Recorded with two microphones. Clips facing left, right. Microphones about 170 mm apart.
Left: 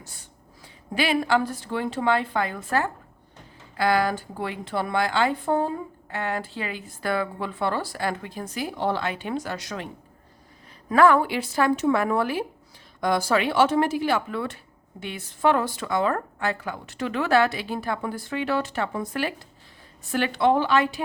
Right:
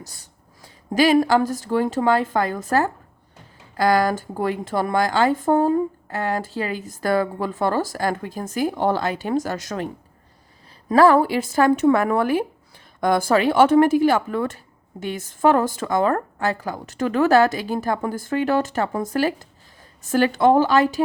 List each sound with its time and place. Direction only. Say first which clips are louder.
0.0 s a woman's voice: right 4 dB; 40° right (ahead or behind)